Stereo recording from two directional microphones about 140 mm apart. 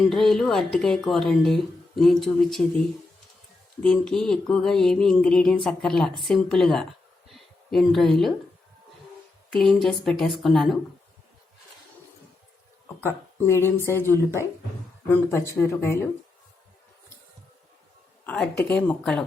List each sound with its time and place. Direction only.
0.1 s speech: centre (ahead or behind)
3.8 s speech: 5° left (ahead or behind)
7.3 s a sound: centre (ahead or behind)
9.5 s speech: 5° left (ahead or behind)
13.0 s speech: 15° left (ahead or behind)
18.3 s speech: 5° left (ahead or behind)